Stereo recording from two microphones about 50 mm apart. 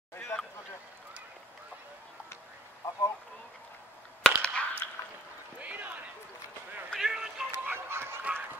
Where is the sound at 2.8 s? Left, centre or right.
Left.